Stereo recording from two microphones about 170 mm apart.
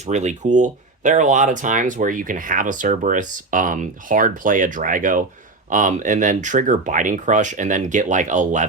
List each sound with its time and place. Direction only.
0.0 s speech: 45° right (ahead or behind)